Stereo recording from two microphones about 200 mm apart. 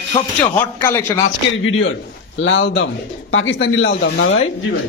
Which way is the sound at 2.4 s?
65° left (ahead or behind).